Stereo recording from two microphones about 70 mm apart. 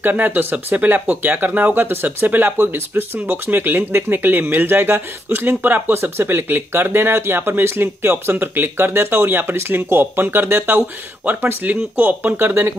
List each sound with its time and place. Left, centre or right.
0.0 s speech: right